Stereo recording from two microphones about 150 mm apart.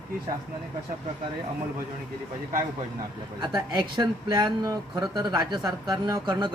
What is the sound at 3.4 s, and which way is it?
Speech, 30° right (ahead or behind).